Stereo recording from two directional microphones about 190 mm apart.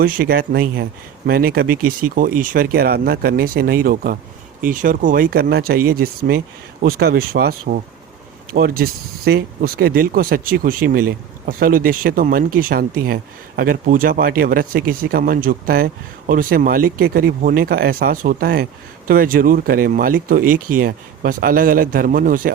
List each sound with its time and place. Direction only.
0.0 s speech: 50° right (ahead or behind)